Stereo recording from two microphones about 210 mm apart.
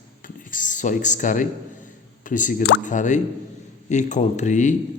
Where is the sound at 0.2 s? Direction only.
40° left (ahead or behind).